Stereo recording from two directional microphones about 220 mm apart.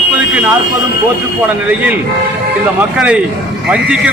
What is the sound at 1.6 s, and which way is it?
Speech, 5° right (ahead or behind).